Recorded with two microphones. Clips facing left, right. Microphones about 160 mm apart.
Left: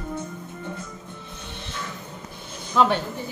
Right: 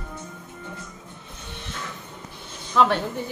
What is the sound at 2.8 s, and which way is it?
Speech, centre (ahead or behind).